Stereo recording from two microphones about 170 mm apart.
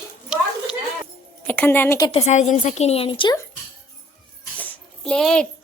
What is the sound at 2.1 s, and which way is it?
A woman's voice, 40° left (ahead or behind).